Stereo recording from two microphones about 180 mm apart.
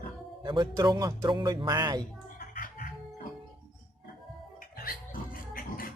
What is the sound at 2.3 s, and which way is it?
Music, 55° left (ahead or behind).